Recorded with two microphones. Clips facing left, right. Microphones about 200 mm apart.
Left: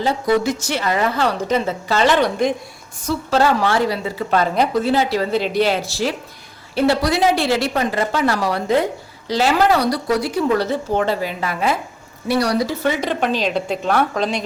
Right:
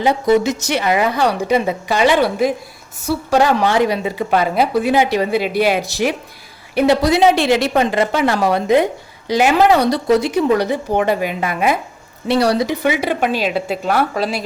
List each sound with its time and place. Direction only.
0.0 s a woman's voice: 20° right (ahead or behind)